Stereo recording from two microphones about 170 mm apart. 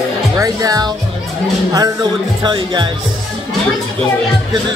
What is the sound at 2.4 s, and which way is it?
Music, 30° right (ahead or behind).